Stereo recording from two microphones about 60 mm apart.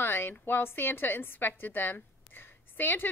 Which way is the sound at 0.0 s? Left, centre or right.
Left.